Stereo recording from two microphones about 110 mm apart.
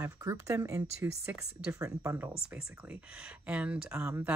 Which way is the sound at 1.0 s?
15° right (ahead or behind).